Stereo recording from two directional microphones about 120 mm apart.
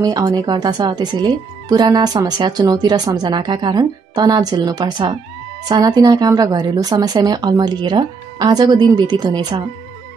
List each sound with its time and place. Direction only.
0.0 s speech: 35° right (ahead or behind)